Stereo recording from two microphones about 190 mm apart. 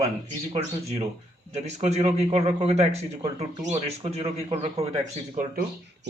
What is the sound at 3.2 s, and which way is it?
Speech, 25° right (ahead or behind).